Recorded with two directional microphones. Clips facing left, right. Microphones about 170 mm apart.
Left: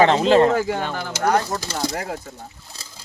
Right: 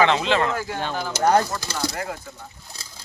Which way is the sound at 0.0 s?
40° left (ahead or behind).